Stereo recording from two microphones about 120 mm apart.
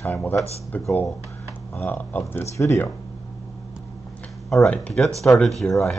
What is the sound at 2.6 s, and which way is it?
Speech, 25° left (ahead or behind).